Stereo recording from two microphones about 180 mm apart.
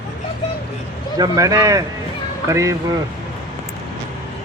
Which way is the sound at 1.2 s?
20° right (ahead or behind).